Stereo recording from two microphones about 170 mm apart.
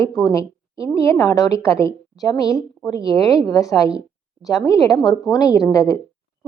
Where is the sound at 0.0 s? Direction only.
20° left (ahead or behind).